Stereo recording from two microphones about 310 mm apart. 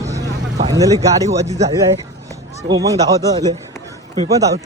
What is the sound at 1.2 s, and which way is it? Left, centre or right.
Speech, right.